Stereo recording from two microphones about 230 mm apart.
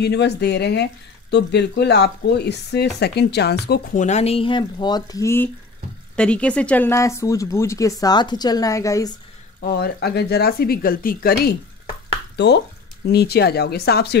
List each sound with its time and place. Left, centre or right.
0.0 s speech: left; by 9.1 s centre
9.7 s speech: left